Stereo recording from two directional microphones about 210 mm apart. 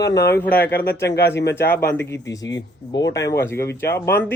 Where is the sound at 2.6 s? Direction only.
20° left (ahead or behind).